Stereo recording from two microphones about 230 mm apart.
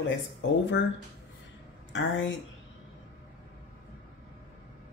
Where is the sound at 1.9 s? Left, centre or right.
Left.